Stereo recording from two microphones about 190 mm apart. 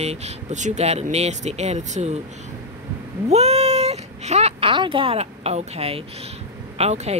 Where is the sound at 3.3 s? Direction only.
35° right (ahead or behind).